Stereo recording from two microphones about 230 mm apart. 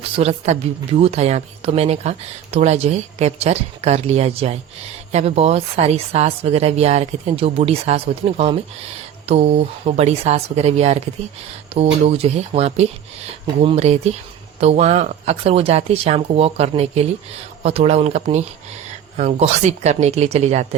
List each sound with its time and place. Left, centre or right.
0.0 s speech: right